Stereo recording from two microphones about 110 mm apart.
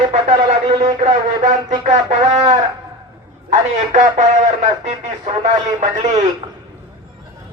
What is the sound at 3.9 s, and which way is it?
Music, 90° right.